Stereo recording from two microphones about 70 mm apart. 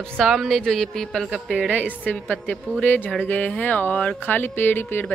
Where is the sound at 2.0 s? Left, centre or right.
Centre.